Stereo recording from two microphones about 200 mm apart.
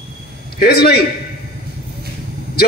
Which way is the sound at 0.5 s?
50° left (ahead or behind).